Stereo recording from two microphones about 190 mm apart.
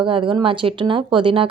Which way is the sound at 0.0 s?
25° right (ahead or behind).